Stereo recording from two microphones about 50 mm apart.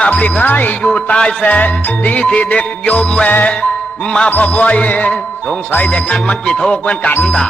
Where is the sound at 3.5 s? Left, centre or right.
Left.